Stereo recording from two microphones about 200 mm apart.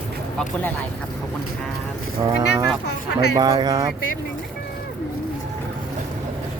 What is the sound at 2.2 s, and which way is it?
Speech, 20° right (ahead or behind).